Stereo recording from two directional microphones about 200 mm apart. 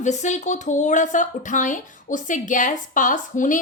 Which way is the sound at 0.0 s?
35° left (ahead or behind).